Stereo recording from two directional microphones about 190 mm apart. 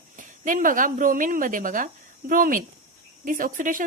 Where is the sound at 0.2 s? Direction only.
45° right (ahead or behind).